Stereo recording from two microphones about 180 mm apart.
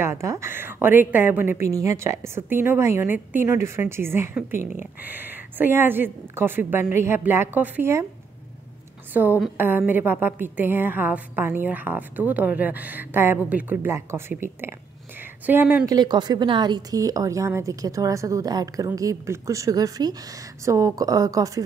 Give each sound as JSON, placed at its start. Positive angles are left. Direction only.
{"t": 0.0, "sound": "a woman's voice", "side_deg": -15}
{"t": 9.1, "sound": "a woman's voice", "side_deg": -10}